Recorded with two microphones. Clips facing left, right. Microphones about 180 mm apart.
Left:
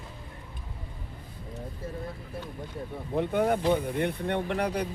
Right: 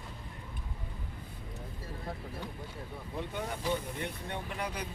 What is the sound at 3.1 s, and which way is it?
Speech, 60° left (ahead or behind).